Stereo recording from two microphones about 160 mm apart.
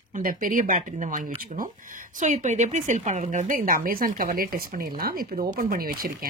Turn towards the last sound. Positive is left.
turn(degrees=-65)  # may be behind; listen again after turning